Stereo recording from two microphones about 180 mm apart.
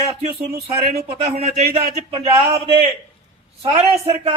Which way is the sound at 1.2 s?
35° right (ahead or behind).